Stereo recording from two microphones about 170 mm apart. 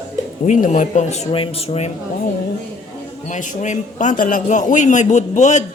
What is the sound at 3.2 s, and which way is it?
A man's voice, 45° left (ahead or behind).